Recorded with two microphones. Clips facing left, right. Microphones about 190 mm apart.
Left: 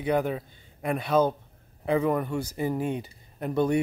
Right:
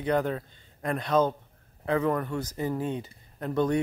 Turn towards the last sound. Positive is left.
turn(degrees=10)  # may be behind; listen again after turning